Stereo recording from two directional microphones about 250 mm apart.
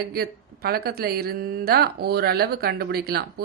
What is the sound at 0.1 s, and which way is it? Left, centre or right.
Speech, right.